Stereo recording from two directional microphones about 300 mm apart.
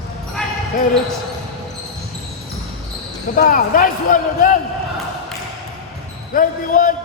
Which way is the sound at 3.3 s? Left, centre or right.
Left.